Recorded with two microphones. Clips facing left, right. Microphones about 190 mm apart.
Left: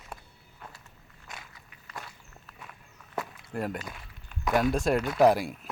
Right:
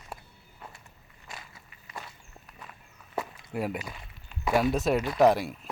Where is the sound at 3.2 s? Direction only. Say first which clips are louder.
Right 1 dB; 5° right (ahead or behind).